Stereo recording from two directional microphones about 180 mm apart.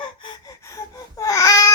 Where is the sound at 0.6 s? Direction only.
20° left (ahead or behind).